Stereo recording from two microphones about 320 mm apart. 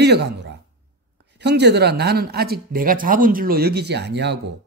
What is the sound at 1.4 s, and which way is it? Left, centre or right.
Speech, right.